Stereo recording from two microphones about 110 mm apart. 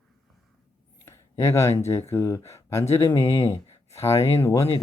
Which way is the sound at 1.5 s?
25° left (ahead or behind).